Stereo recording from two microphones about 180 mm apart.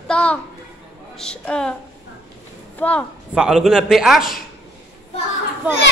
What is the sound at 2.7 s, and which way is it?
Speech, 10° left (ahead or behind).